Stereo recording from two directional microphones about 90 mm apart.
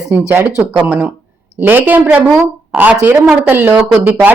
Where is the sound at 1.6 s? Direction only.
20° right (ahead or behind).